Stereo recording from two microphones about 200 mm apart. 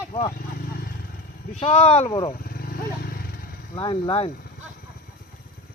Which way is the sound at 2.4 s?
50° left (ahead or behind).